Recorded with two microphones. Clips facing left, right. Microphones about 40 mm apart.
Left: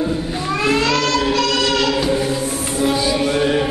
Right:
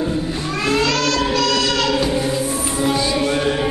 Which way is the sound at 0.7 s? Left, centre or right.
Left.